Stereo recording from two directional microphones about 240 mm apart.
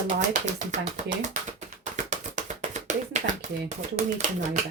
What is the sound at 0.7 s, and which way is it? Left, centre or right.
Speech, right.